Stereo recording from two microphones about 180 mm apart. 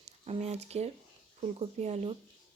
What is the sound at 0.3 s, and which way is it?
Speech, 35° right (ahead or behind).